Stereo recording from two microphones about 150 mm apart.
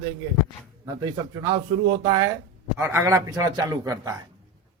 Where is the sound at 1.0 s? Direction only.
30° right (ahead or behind).